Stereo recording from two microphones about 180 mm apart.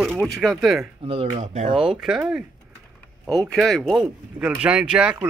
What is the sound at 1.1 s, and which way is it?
Speech, 35° right (ahead or behind).